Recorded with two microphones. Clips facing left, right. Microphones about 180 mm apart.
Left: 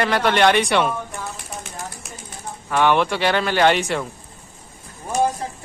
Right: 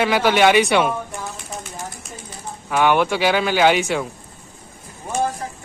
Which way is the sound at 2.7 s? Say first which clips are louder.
Right 1 dB; 5° right (ahead or behind).